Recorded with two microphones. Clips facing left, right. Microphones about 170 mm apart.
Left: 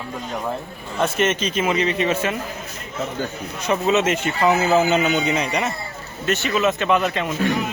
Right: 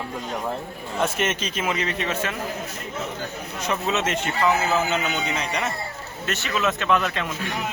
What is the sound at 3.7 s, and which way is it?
Speech, 5° left (ahead or behind).